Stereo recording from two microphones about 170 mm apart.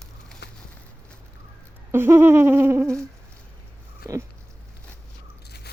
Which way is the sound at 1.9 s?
15° right (ahead or behind).